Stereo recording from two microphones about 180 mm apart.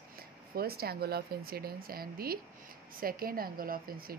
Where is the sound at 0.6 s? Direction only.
60° right (ahead or behind).